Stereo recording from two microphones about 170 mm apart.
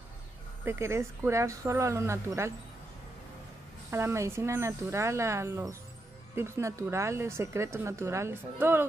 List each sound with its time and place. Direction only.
0.7 s speech: 15° right (ahead or behind)
3.9 s speech: 15° right (ahead or behind)